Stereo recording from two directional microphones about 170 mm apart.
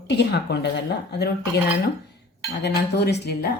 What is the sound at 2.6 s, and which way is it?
Speech, 80° left.